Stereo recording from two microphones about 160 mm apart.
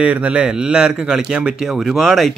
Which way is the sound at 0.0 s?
10° right (ahead or behind).